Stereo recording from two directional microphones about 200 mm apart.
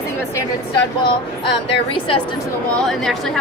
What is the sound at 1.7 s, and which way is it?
Speech, 25° left (ahead or behind).